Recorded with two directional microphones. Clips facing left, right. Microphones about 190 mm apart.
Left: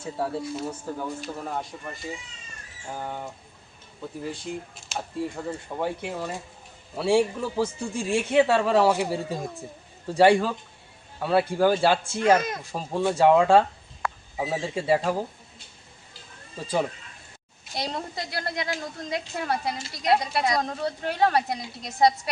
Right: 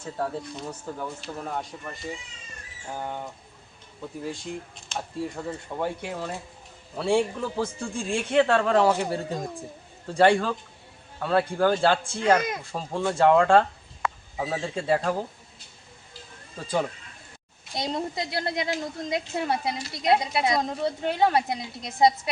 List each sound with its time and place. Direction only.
0.0 s a man's voice: 5° left (ahead or behind)
12.4 s speech: 10° right (ahead or behind)
12.7 s speech: 10° left (ahead or behind)
17.7 s a woman's voice: 20° right (ahead or behind)